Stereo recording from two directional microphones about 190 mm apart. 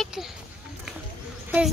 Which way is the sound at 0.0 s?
Centre (ahead or behind).